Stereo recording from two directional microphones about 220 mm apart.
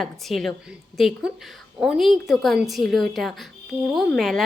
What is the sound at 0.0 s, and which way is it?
A woman's voice, centre (ahead or behind).